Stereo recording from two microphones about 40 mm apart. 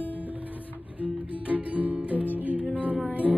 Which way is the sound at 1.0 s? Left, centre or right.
Right.